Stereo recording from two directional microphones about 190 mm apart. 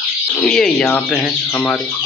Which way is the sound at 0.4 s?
5° left (ahead or behind).